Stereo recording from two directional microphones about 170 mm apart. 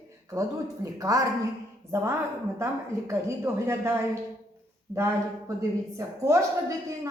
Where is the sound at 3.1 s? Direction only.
15° right (ahead or behind).